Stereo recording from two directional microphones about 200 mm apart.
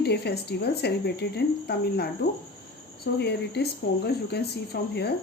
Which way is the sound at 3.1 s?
55° left (ahead or behind).